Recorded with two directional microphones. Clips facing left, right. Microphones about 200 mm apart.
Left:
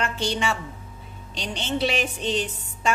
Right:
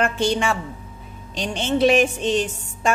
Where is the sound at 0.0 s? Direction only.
50° right (ahead or behind).